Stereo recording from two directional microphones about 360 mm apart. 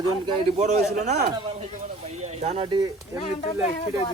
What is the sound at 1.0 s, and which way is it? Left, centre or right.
Speech, centre.